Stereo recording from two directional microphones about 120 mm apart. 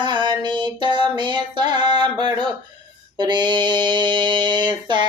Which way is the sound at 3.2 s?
40° right (ahead or behind).